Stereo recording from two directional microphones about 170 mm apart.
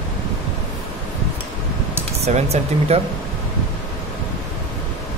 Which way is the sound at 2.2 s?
40° right (ahead or behind).